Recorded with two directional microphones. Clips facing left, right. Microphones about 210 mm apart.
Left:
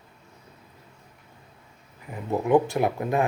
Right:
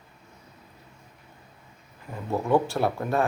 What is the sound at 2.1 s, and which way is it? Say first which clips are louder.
Speech: left 2 dB; 15° left (ahead or behind).